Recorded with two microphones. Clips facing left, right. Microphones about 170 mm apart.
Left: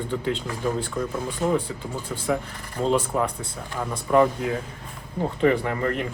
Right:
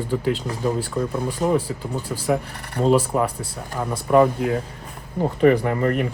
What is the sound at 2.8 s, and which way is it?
Speech, 5° right (ahead or behind).